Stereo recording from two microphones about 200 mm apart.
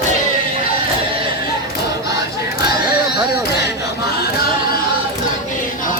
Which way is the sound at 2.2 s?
55° left (ahead or behind).